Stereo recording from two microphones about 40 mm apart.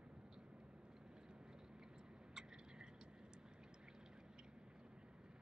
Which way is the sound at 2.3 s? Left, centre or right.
Centre.